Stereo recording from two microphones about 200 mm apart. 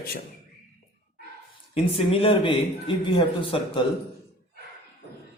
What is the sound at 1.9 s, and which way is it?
A man's voice, 30° left (ahead or behind).